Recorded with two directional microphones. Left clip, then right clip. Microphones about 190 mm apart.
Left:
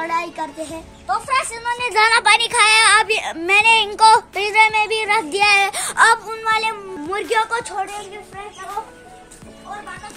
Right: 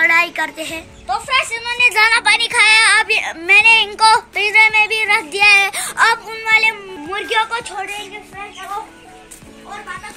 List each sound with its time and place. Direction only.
0.0 s a woman's voice: 10° left (ahead or behind)
2.0 s speech: 55° left (ahead or behind)
6.2 s speech: 10° left (ahead or behind)